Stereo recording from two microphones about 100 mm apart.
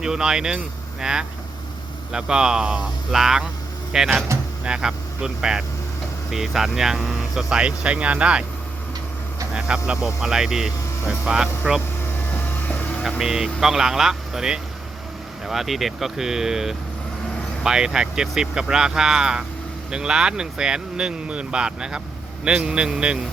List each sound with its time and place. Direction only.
0.0 s speech: 5° right (ahead or behind)
9.5 s speech: 10° right (ahead or behind)
12.3 s vehicle: 20° left (ahead or behind)
13.0 s speech: 5° right (ahead or behind)